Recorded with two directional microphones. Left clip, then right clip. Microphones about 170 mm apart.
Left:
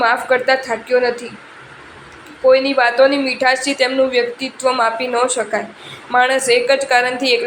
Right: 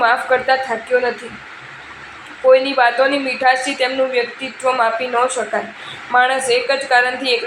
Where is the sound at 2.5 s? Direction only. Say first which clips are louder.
Right 1 dB; 30° left (ahead or behind).